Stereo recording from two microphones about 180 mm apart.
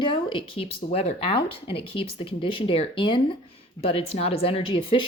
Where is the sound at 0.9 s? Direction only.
45° left (ahead or behind).